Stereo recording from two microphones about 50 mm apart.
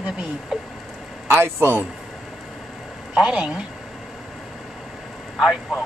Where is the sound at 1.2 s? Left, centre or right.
Right.